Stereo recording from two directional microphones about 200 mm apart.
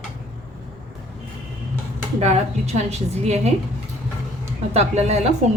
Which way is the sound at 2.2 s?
35° right (ahead or behind).